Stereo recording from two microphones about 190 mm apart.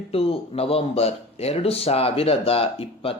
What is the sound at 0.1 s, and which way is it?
Speech, 30° left (ahead or behind).